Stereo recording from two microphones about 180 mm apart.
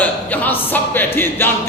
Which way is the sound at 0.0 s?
10° left (ahead or behind).